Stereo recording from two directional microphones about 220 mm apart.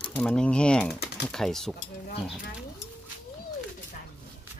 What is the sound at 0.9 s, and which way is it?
Typing, 50° left (ahead or behind).